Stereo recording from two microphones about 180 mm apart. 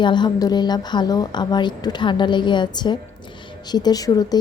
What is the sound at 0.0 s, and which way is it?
A woman's voice, 25° left (ahead or behind).